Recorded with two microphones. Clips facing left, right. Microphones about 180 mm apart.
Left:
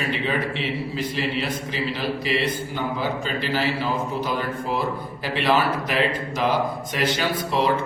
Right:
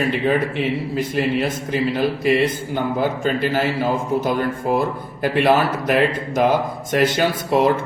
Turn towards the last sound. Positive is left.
turn(degrees=-45)  # may be behind; listen again after turning